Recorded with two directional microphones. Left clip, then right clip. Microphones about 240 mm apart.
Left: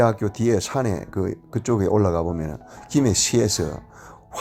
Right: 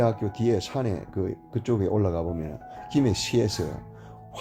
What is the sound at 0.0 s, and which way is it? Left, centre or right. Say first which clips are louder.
Speech: left 5 dB; centre.